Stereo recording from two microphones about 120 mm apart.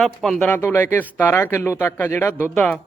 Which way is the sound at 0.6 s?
20° left (ahead or behind).